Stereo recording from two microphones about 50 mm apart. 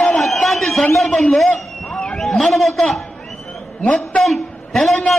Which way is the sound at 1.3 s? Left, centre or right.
Centre.